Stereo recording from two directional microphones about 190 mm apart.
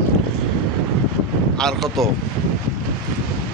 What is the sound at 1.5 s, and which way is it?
Speech, centre (ahead or behind).